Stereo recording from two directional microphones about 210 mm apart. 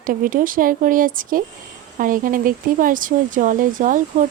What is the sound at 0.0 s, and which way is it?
Speech, 40° right (ahead or behind).